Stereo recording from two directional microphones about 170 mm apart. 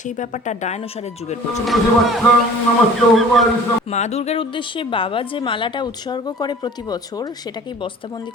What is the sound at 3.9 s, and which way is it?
A woman's voice, 40° left (ahead or behind).